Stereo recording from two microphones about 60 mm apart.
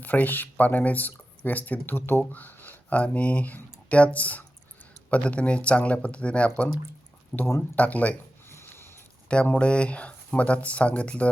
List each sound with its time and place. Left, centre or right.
0.0 s speech: left
7.3 s speech: left
7.8 s speech: left
8.4 s a sound: left
9.5 s speech: centre